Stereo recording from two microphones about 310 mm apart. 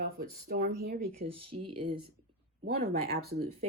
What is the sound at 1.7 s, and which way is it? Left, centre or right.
Speech, centre.